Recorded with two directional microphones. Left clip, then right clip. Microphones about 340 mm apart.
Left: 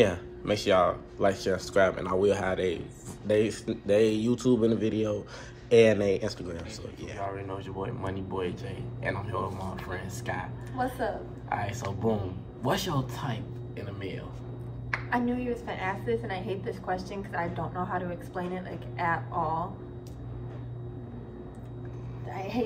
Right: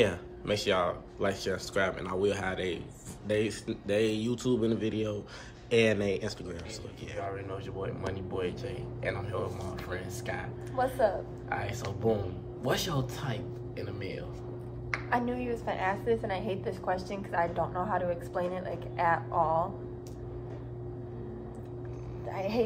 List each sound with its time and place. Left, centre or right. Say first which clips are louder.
0.0 s speech: left 3 dB; centre
11.4 s speech: left 5 dB; centre
15.0 s a woman's voice: left 1 dB; centre
22.3 s a woman's voice: right 2 dB; centre